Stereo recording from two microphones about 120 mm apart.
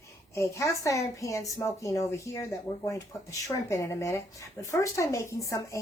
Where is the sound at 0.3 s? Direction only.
25° left (ahead or behind).